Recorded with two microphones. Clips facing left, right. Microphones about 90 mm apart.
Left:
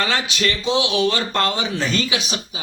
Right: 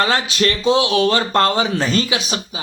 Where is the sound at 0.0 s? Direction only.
35° right (ahead or behind).